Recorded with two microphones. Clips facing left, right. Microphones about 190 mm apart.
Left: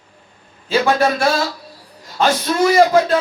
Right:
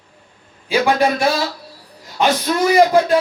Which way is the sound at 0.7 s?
15° right (ahead or behind).